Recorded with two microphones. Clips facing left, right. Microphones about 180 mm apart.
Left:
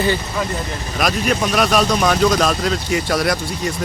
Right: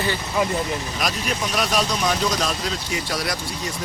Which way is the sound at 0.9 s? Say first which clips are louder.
Left 11 dB; 60° left (ahead or behind).